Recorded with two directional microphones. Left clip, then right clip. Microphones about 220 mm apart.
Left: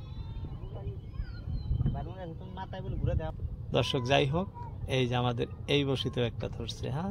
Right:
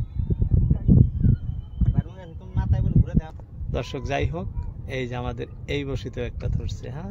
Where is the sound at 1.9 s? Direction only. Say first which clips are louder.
Right 4 dB; 50° right (ahead or behind).